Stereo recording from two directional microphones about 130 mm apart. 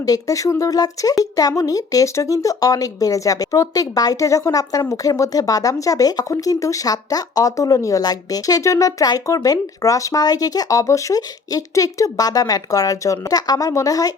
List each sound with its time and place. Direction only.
0.0 s speech: 25° left (ahead or behind)